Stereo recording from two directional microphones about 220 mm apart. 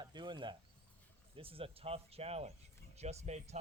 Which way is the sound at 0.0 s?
20° right (ahead or behind).